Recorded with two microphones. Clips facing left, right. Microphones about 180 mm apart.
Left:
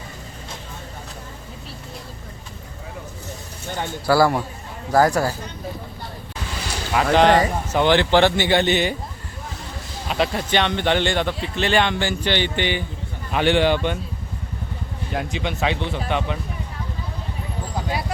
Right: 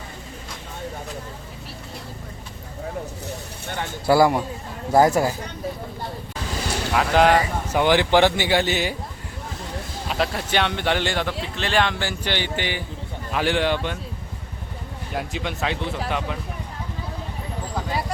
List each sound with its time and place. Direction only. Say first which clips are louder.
4.0 s speech: right 1 dB; 20° right (ahead or behind)
6.9 s speech: left 2 dB; 5° right (ahead or behind)
10.1 s speech: left 3 dB; centre (ahead or behind)
15.1 s speech: left 2 dB; centre (ahead or behind)